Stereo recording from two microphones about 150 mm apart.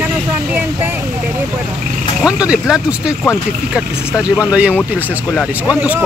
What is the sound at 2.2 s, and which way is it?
Speech, 5° right (ahead or behind).